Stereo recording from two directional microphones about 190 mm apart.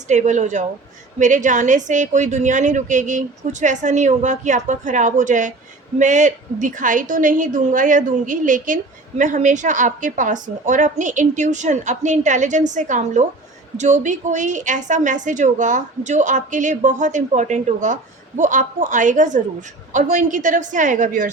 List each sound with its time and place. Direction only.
0.1 s a woman's voice: 40° right (ahead or behind)